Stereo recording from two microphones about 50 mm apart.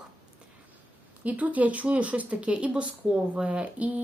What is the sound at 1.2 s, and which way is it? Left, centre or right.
Speech, right.